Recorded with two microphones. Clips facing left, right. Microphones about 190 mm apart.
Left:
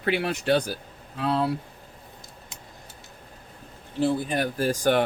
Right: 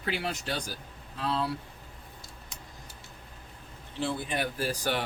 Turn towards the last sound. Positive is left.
turn(degrees=45)  # may be behind; listen again after turning